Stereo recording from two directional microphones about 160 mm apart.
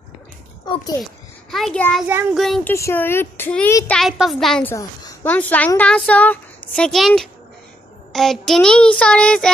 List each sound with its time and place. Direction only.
1.5 s speech: centre (ahead or behind)
2.6 s a child's voice: 15° left (ahead or behind)
4.0 s speech: centre (ahead or behind)
4.6 s a woman's voice: 20° left (ahead or behind)
5.2 s a child's voice: 10° left (ahead or behind)